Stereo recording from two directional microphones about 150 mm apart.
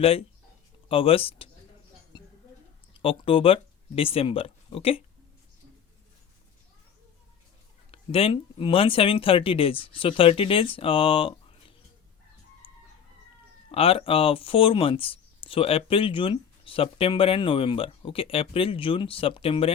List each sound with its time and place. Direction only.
0.0 s speech: 40° left (ahead or behind)
3.0 s speech: 35° left (ahead or behind)
7.9 s speech: 40° left (ahead or behind)
12.6 s chicken: 35° left (ahead or behind)
13.7 s speech: 40° left (ahead or behind)